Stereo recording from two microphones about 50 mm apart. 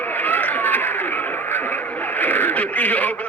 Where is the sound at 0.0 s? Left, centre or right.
Left.